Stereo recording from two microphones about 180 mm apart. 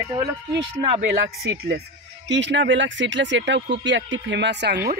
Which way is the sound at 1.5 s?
65° right (ahead or behind).